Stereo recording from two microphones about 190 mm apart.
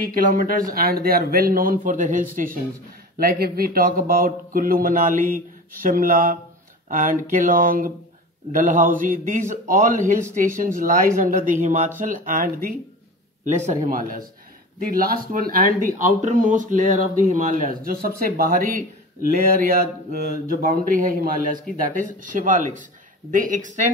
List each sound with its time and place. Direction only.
0.0 s speech: 45° right (ahead or behind)